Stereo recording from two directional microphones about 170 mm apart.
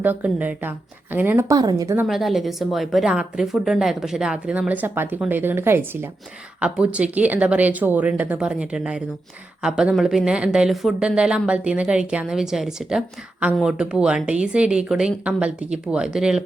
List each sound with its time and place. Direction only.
0.0 s speech: 10° right (ahead or behind)
2.0 s speech: centre (ahead or behind)